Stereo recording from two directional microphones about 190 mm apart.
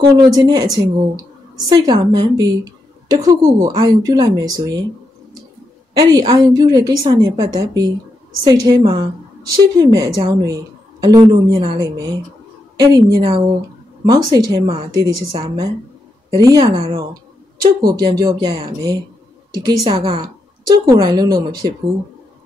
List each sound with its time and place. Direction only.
0.2 s a woman's voice: 20° right (ahead or behind)
6.0 s a woman's voice: 20° right (ahead or behind)
15.4 s a woman's voice: 20° right (ahead or behind)